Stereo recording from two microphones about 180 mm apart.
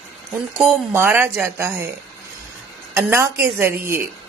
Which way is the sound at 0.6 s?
10° right (ahead or behind).